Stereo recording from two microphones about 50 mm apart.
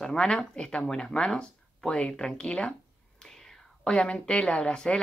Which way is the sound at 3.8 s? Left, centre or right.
Centre.